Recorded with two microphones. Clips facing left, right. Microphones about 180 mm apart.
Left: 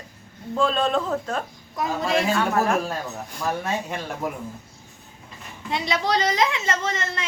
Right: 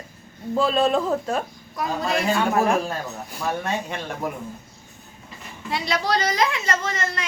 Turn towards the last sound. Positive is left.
turn(degrees=25)  # may be behind; listen again after turning